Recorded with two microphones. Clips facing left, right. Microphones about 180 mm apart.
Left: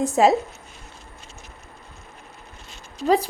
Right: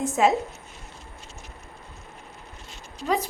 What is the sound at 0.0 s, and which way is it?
Speech, 35° left (ahead or behind).